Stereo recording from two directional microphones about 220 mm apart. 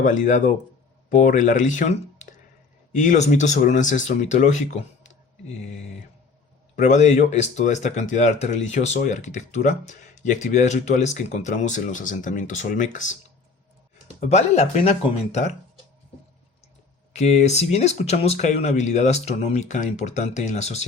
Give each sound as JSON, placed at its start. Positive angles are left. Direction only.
{"t": 0.0, "sound": "speech", "side_deg": 35}
{"t": 6.7, "sound": "speech", "side_deg": 35}
{"t": 14.2, "sound": "speech", "side_deg": 30}
{"t": 17.1, "sound": "speech", "side_deg": 30}